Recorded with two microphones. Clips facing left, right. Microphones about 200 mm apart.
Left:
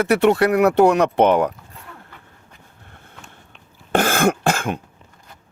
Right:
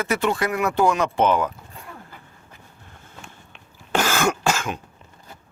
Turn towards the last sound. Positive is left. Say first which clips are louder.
# left 4 dB
turn(degrees=55)  # may be behind; listen again after turning